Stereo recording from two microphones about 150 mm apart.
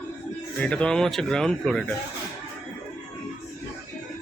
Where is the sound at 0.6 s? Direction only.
5° left (ahead or behind).